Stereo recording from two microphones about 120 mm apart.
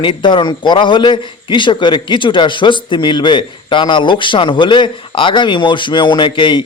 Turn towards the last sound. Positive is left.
turn(degrees=40)  # may be behind; listen again after turning